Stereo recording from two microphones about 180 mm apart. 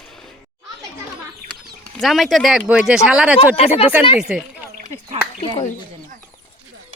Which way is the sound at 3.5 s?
35° left (ahead or behind).